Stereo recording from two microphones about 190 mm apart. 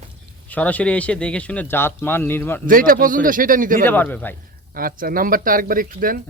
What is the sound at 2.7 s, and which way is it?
Speech, 50° right (ahead or behind).